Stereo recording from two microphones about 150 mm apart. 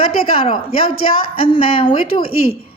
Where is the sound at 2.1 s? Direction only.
40° left (ahead or behind).